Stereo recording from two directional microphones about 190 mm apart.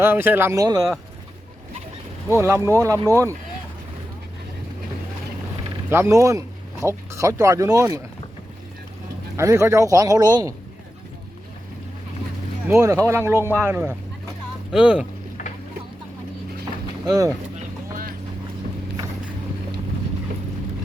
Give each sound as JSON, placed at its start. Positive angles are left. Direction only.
{"t": 0.0, "sound": "speech", "side_deg": -10}
{"t": 2.3, "sound": "speech", "side_deg": -15}
{"t": 5.9, "sound": "speech", "side_deg": -15}
{"t": 9.3, "sound": "speech", "side_deg": -15}
{"t": 12.6, "sound": "speech", "side_deg": -15}